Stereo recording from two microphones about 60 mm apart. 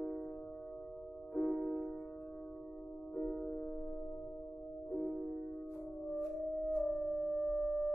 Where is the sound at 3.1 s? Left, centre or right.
Centre.